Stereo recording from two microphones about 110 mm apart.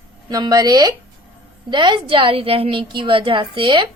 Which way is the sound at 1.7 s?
45° right (ahead or behind).